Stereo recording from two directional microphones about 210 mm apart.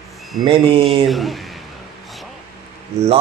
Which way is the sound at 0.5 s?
25° right (ahead or behind).